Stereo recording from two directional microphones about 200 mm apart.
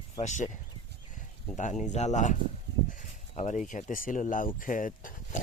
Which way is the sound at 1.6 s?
40° left (ahead or behind).